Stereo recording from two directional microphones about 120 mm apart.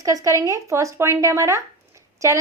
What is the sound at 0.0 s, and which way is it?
A woman's voice, 30° right (ahead or behind).